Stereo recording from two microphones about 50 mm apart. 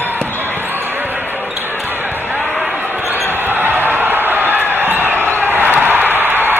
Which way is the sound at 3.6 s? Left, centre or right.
Right.